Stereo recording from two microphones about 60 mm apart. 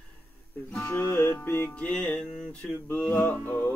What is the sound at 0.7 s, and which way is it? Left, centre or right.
Speech, left.